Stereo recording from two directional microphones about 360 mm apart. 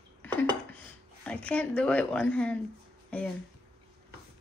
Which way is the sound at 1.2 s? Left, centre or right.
Centre.